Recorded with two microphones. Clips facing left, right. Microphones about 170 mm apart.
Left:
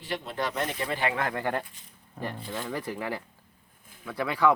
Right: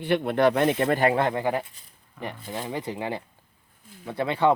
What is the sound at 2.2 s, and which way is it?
Speech, 35° left (ahead or behind).